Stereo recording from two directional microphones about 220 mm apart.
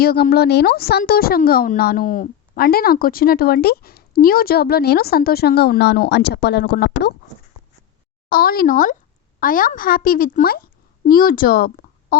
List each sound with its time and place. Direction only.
0.0 s speech: 45° left (ahead or behind)
8.3 s a child's voice: 40° left (ahead or behind)